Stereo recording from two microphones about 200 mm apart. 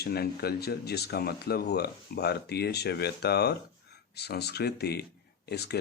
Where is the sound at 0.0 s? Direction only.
50° left (ahead or behind).